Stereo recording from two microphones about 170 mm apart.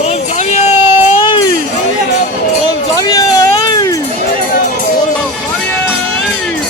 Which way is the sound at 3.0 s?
20° left (ahead or behind).